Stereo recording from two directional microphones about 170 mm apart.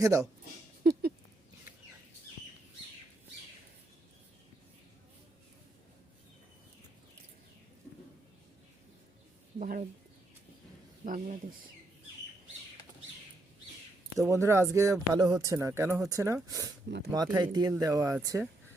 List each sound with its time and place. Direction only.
0.0 s speech: 20° right (ahead or behind)
0.8 s a sound: 70° right (ahead or behind)
9.6 s speech: 55° right (ahead or behind)
11.0 s speech: 50° right (ahead or behind)
14.2 s speech: 15° right (ahead or behind)
16.9 s speech: 90° right
17.3 s speech: 25° right (ahead or behind)